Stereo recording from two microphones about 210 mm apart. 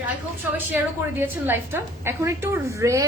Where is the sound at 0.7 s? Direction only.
10° right (ahead or behind).